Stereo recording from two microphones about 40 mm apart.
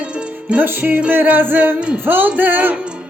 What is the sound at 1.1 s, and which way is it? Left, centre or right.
Music, right.